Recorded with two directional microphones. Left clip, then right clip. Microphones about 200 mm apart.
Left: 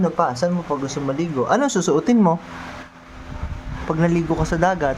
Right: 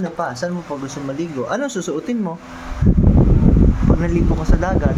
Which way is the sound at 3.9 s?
20° left (ahead or behind).